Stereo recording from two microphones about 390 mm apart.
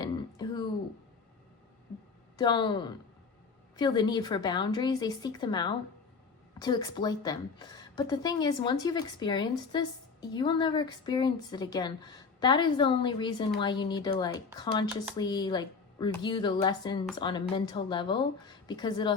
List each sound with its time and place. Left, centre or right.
0.0 s throat clearing: centre
2.3 s a woman's voice: centre